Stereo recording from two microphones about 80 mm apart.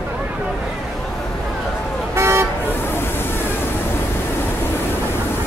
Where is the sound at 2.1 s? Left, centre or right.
Right.